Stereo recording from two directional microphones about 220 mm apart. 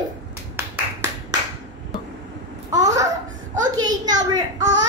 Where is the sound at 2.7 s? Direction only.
15° right (ahead or behind).